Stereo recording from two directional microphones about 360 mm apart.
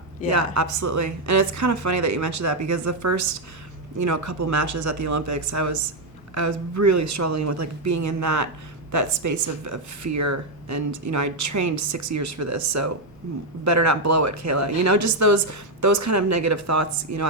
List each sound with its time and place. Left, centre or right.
0.3 s speech: right